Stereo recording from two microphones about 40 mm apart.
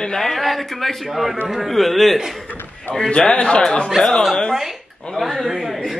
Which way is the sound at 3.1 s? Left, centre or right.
Left.